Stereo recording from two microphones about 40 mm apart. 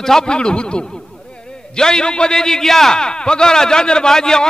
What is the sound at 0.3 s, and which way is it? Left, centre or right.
A man's voice, left.